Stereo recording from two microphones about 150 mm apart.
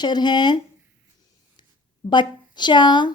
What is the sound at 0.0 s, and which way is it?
Speech, 30° left (ahead or behind).